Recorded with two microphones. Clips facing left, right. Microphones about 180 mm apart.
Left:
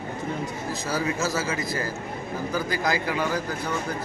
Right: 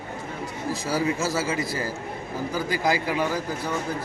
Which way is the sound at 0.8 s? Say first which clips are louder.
Right 2 dB; 10° right (ahead or behind).